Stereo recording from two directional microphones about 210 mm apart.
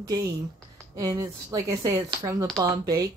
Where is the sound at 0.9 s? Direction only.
15° right (ahead or behind).